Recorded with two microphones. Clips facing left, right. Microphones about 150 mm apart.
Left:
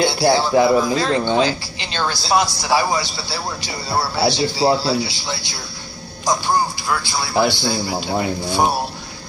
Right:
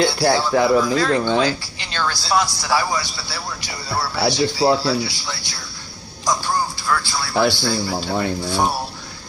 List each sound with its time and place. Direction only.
0.0 s a man's voice: 25° left (ahead or behind)